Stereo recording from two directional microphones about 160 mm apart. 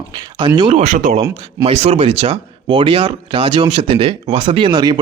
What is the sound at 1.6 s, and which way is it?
Speech, 40° right (ahead or behind).